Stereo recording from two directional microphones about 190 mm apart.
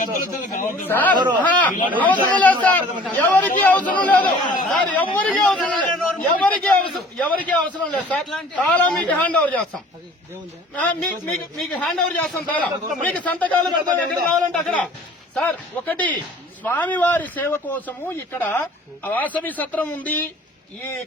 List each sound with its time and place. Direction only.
0.0 s a sound: 45° left (ahead or behind)
0.9 s a man's voice: 10° left (ahead or behind)
1.1 s speech: 25° right (ahead or behind)
1.4 s a sound: 10° left (ahead or behind)
3.0 s a man's voice: 10° left (ahead or behind)
10.8 s a man's voice: 5° left (ahead or behind)